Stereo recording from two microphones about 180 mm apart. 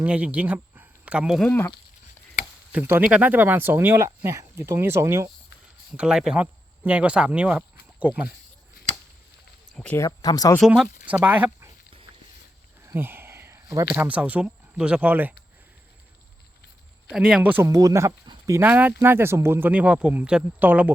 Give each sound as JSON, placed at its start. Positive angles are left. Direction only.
{"t": 0.0, "sound": "speech", "side_deg": -10}
{"t": 2.7, "sound": "speech", "side_deg": -10}
{"t": 5.9, "sound": "speech", "side_deg": -5}
{"t": 9.7, "sound": "speech", "side_deg": 10}
{"t": 10.1, "sound": "speech", "side_deg": 20}
{"t": 10.6, "sound": "speech", "side_deg": -5}
{"t": 12.8, "sound": "a sound", "side_deg": -15}
{"t": 13.9, "sound": "speech", "side_deg": -10}
{"t": 17.1, "sound": "speech", "side_deg": -5}